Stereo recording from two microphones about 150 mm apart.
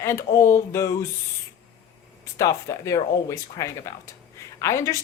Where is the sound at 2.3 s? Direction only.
20° left (ahead or behind).